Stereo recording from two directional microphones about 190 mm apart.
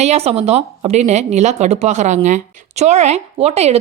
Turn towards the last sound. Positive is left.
turn(degrees=-35)  # may be behind; listen again after turning